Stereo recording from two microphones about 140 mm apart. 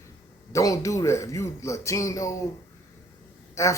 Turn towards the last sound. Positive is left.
turn(degrees=20)  # may be behind; listen again after turning